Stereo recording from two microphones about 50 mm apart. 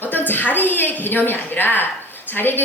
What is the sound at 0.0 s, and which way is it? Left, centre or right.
A woman's voice, left.